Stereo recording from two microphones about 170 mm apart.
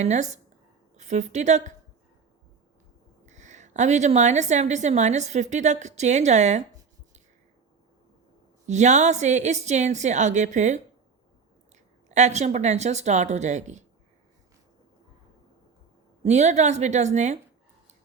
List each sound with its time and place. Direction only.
0.0 s a woman's voice: 40° right (ahead or behind)
3.2 s a woman's voice: 45° right (ahead or behind)
8.6 s a woman's voice: 45° right (ahead or behind)
12.0 s a woman's voice: 45° right (ahead or behind)
16.2 s a woman's voice: 40° right (ahead or behind)